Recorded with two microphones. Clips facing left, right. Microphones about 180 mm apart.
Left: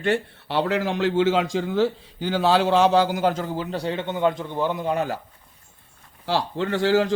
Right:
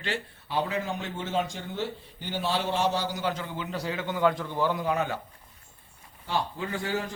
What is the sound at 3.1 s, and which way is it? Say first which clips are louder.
A man's voice: left 8 dB; 50° left (ahead or behind).